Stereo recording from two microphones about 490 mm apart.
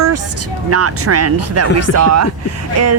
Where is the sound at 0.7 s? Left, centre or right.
Right.